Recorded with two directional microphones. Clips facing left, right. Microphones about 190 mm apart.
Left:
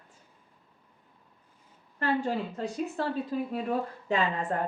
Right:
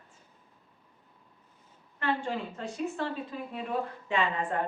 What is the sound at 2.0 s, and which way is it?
Speech, 35° left (ahead or behind).